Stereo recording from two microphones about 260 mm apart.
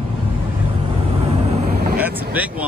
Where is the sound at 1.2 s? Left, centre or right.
Right.